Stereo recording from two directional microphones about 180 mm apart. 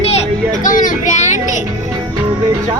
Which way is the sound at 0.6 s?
45° left (ahead or behind).